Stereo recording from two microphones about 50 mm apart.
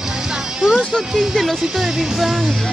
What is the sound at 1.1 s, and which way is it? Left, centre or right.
Speech, centre.